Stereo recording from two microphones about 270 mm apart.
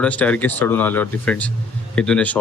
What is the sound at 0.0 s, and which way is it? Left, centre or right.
Speech, centre.